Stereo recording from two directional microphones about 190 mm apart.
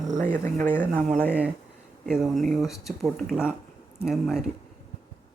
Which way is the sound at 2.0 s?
Centre (ahead or behind).